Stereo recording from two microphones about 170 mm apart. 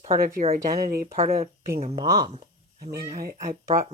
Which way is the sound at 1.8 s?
40° right (ahead or behind).